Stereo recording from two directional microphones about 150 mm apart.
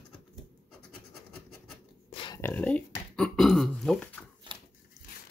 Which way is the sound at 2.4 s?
10° left (ahead or behind).